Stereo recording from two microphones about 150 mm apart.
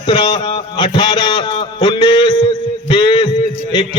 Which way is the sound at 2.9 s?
30° left (ahead or behind).